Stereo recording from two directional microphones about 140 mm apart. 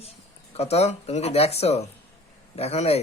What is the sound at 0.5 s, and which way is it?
A man's voice, 50° left (ahead or behind).